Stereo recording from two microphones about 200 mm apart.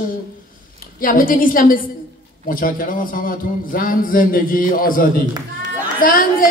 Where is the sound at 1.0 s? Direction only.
45° left (ahead or behind).